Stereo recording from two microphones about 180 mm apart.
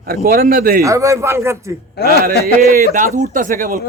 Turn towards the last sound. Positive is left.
turn(degrees=-50)  # may be behind; listen again after turning